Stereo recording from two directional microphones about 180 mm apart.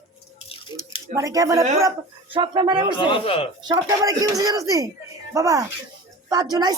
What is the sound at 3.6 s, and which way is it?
A woman's voice, 20° right (ahead or behind).